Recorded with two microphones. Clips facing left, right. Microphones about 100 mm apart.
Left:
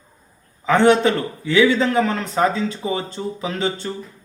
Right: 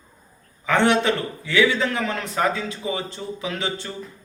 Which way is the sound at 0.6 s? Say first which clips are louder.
Left 4 dB; 30° left (ahead or behind).